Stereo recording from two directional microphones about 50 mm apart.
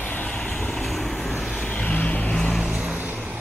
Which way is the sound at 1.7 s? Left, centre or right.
Left.